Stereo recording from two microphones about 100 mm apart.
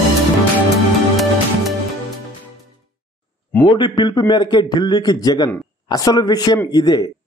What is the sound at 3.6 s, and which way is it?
A man's voice, 50° left (ahead or behind).